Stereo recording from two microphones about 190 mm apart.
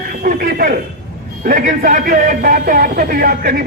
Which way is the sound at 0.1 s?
50° right (ahead or behind).